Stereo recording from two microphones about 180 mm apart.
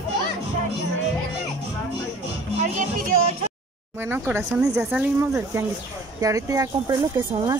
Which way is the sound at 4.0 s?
10° right (ahead or behind).